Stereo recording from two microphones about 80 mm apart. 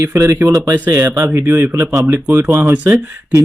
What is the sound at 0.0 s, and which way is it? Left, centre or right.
Speech, right.